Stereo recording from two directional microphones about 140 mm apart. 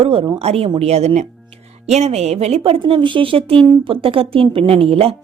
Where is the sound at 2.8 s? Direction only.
35° right (ahead or behind).